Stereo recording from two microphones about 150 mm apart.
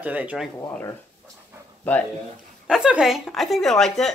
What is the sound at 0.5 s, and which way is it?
Speech, 15° left (ahead or behind).